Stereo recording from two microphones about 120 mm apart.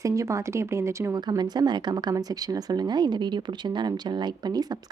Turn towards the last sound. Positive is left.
turn(degrees=-35)  # may be behind; listen again after turning